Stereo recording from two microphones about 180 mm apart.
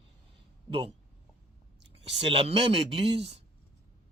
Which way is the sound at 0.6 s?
25° right (ahead or behind).